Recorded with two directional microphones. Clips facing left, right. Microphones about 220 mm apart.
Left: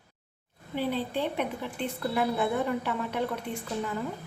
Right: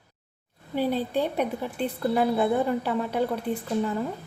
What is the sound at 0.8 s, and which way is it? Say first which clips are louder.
A woman's voice: right 4 dB; 40° right (ahead or behind).